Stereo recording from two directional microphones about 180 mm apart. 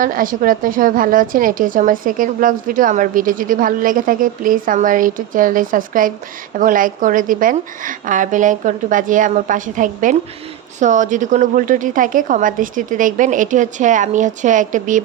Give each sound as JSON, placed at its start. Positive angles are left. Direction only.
{"t": 0.0, "sound": "a woman's voice", "side_deg": -50}